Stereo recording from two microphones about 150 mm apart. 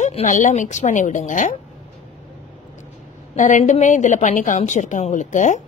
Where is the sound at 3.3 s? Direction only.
55° left (ahead or behind).